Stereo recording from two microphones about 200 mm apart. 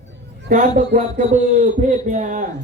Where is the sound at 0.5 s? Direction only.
40° right (ahead or behind).